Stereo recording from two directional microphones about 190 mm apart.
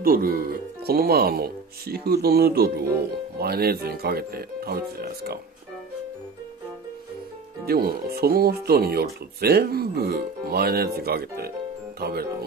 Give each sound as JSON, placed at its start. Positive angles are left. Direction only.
{"t": 0.0, "sound": "speech", "side_deg": -50}
{"t": 7.6, "sound": "speech", "side_deg": -50}